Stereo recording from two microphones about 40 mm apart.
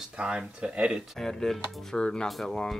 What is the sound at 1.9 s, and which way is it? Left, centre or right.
Speech, left.